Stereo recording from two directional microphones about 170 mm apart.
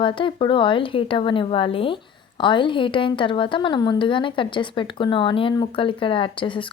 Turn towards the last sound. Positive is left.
turn(degrees=30)  # may be behind; listen again after turning